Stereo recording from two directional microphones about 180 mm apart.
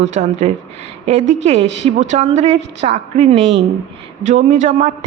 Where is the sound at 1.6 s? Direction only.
80° right.